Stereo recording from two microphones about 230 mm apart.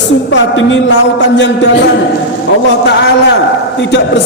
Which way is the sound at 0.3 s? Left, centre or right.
Left.